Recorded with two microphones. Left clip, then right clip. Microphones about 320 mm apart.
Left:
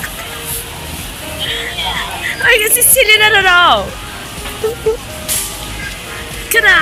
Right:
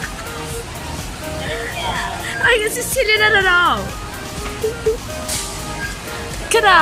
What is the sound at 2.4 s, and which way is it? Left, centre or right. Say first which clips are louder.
Speech: left 4 dB; centre.